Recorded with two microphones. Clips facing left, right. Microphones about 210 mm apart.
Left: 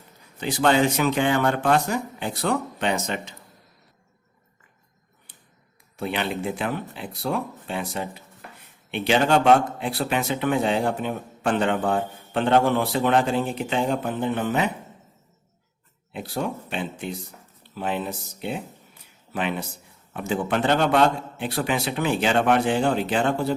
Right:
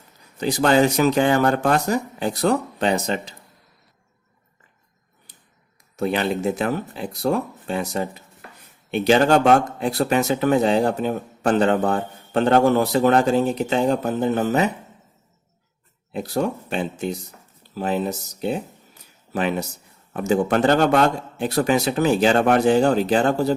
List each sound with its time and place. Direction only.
0.3 s a man's voice: 40° right (ahead or behind)
6.0 s a man's voice: 40° right (ahead or behind)
16.1 s a man's voice: 40° right (ahead or behind)